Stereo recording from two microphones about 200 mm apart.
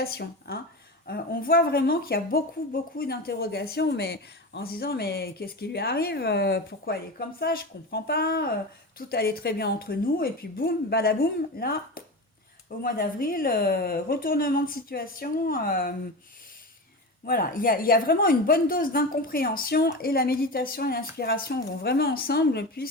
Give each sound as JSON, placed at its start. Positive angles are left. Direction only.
{"t": 0.0, "sound": "speech", "side_deg": 50}
{"t": 17.2, "sound": "speech", "side_deg": 45}